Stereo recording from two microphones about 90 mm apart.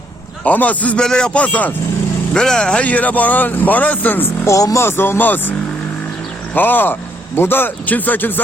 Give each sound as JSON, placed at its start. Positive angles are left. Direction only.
{"t": 0.4, "sound": "speech", "side_deg": 15}
{"t": 2.3, "sound": "speech", "side_deg": 5}
{"t": 4.5, "sound": "speech", "side_deg": 35}